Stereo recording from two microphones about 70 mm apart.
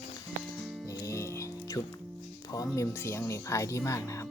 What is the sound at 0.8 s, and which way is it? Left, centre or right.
Music, left.